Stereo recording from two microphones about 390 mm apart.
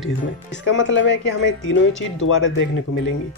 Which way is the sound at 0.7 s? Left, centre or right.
Left.